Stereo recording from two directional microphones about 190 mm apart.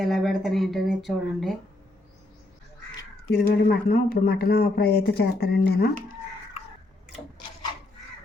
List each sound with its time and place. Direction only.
0.0 s speech: centre (ahead or behind)
3.3 s speech: 55° left (ahead or behind)